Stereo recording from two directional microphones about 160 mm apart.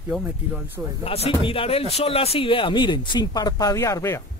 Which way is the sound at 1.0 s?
35° left (ahead or behind).